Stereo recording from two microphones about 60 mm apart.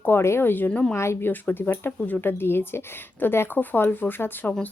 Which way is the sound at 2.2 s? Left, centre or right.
Left.